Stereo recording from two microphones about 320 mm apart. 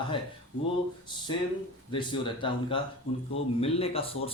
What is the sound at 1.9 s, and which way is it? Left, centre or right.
Speech, centre.